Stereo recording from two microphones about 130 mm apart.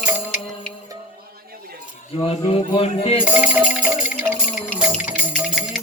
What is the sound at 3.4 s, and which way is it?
Music, 10° right (ahead or behind).